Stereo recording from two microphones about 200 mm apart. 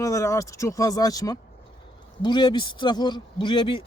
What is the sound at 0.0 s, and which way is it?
A man's voice, 15° left (ahead or behind).